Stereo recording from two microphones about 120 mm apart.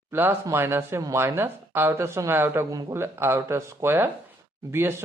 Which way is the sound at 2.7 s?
30° right (ahead or behind).